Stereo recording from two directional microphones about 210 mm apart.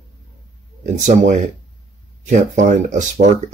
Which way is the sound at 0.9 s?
35° right (ahead or behind).